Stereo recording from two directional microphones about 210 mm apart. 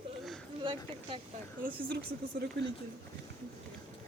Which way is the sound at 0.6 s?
25° right (ahead or behind).